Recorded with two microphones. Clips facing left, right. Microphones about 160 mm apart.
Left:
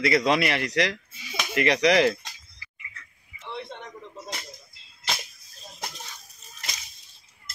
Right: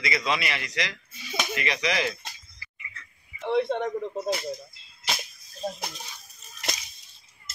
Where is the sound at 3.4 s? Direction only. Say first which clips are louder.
Right 13 dB; 55° right (ahead or behind).